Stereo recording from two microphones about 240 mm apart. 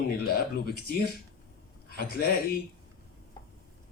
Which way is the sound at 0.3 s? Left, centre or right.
Left.